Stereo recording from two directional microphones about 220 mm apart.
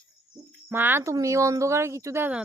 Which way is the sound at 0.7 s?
10° right (ahead or behind).